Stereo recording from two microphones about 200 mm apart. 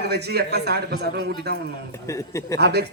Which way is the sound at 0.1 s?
55° right (ahead or behind).